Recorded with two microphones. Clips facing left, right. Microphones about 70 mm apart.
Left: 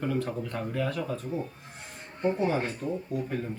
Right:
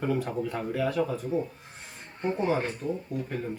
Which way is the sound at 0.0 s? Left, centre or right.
Centre.